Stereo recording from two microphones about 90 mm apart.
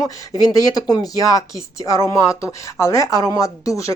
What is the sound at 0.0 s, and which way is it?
Speech, 40° left (ahead or behind).